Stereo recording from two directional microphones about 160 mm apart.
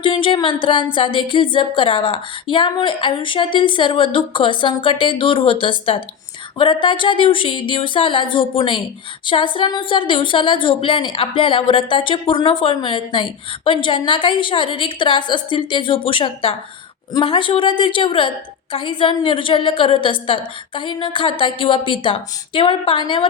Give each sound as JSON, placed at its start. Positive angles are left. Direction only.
{"t": 0.0, "sound": "a woman's voice", "side_deg": 30}